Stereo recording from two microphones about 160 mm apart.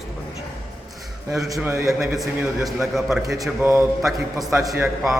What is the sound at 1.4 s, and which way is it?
Speech, 20° right (ahead or behind).